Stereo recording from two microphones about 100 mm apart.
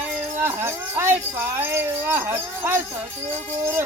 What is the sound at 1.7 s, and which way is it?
Speech, 25° right (ahead or behind).